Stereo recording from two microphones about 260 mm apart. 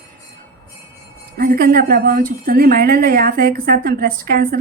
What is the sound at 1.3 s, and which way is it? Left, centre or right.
A woman's voice, right.